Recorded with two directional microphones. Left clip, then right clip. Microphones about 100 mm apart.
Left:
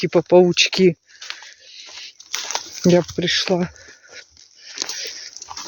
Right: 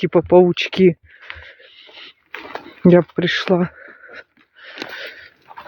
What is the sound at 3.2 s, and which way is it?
Speech, 40° right (ahead or behind).